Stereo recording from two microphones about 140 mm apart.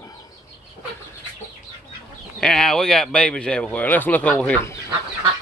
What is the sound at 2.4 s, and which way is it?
Speech, 5° left (ahead or behind).